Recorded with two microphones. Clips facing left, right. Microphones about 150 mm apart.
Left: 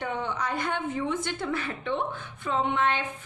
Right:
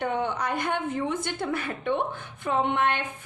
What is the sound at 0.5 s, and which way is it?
Speech, 15° right (ahead or behind).